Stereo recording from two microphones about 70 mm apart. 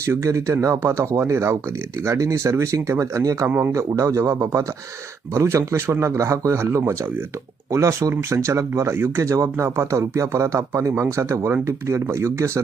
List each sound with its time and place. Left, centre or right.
0.2 s speech: right
9.2 s speech: right